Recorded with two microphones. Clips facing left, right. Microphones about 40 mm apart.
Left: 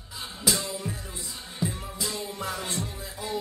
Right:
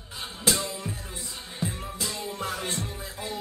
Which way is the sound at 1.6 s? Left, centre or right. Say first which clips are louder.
Left 1 dB; right.